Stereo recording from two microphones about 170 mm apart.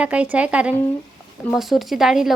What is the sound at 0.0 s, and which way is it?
A woman's voice, 5° right (ahead or behind).